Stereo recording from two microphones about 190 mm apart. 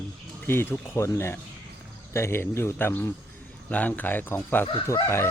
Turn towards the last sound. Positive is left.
turn(degrees=10)  # may be behind; listen again after turning